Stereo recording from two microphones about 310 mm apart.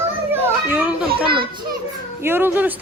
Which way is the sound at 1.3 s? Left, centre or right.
Centre.